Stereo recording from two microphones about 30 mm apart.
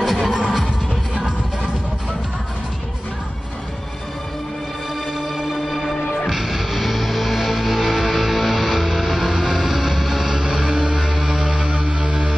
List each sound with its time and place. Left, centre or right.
0.0 s music: centre
5.3 s music: centre; by 11.6 s right